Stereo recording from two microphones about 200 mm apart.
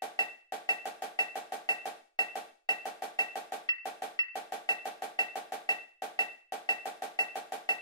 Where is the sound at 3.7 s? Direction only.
20° left (ahead or behind).